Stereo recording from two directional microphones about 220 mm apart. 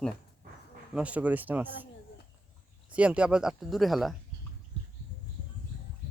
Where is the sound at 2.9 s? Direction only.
5° right (ahead or behind).